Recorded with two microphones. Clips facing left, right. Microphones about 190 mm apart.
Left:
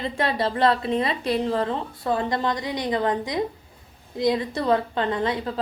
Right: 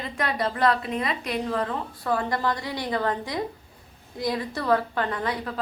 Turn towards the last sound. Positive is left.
turn(degrees=25)  # may be behind; listen again after turning